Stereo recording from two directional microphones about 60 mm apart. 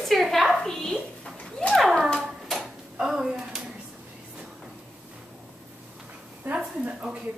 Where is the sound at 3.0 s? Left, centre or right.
Centre.